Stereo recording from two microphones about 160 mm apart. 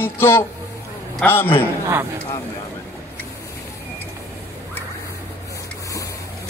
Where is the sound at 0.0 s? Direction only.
15° left (ahead or behind).